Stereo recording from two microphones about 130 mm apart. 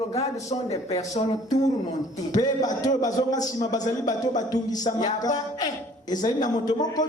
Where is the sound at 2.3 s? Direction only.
30° left (ahead or behind).